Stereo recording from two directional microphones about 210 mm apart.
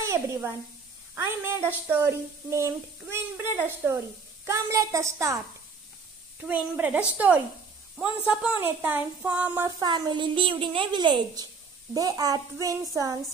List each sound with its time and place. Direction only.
0.0 s a woman's voice: 15° right (ahead or behind)
6.4 s speech: 5° right (ahead or behind)